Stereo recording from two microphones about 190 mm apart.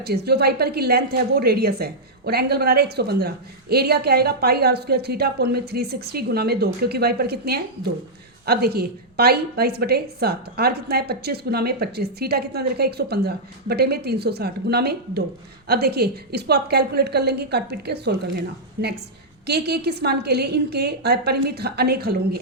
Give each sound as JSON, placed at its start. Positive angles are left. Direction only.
{"t": 0.0, "sound": "a woman's voice", "side_deg": -55}